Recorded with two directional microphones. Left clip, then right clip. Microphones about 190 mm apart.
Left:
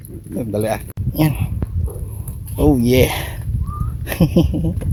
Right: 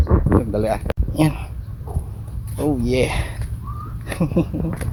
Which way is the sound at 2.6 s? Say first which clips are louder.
Left 5 dB; 35° left (ahead or behind).